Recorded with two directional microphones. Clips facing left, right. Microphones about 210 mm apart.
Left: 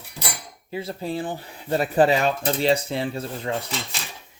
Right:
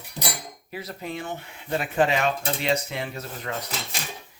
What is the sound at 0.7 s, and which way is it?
Speech, 25° left (ahead or behind).